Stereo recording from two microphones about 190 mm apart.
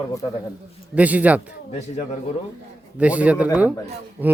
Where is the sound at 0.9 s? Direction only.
10° right (ahead or behind).